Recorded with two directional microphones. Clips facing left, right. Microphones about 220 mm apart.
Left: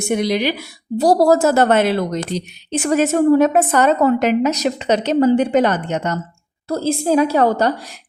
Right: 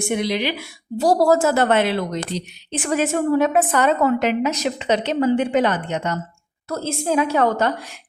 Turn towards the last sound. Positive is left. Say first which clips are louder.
# left 3 dB
turn(degrees=35)  # may be behind; listen again after turning